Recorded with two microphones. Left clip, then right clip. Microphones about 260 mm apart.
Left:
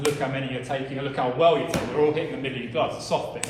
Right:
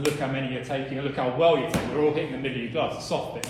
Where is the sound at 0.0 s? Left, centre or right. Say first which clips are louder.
Left 1 dB; left.